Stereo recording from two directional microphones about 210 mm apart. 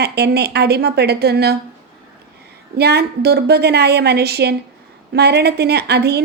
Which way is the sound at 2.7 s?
50° right (ahead or behind).